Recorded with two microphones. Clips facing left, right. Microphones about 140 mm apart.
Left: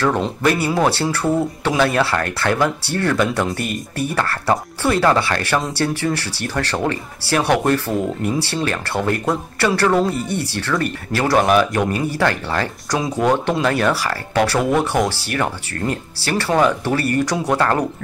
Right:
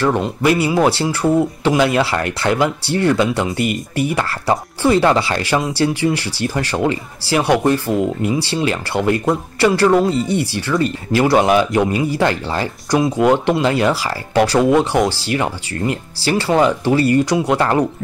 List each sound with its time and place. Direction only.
0.2 s speech: 15° right (ahead or behind)
13.5 s speech: 20° right (ahead or behind)